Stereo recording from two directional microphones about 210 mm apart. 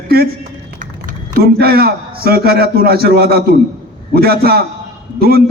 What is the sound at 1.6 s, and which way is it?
A man's voice, 45° right (ahead or behind).